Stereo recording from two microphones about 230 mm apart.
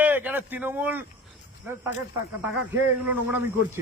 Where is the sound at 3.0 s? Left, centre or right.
Centre.